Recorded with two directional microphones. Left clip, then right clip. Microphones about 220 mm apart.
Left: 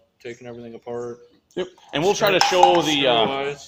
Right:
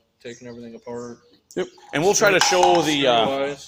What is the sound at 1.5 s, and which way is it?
Speech, 25° right (ahead or behind).